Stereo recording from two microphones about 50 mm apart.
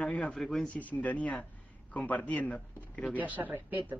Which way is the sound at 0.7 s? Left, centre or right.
Left.